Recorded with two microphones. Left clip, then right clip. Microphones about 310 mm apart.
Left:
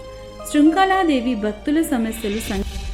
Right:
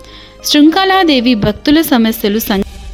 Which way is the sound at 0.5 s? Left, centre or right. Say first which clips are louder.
Right 7 dB; right.